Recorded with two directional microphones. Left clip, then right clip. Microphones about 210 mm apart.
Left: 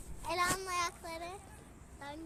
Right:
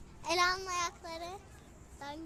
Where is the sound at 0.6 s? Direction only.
Centre (ahead or behind).